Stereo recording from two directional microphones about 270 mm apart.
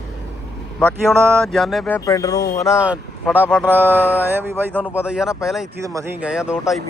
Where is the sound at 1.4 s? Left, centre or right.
Centre.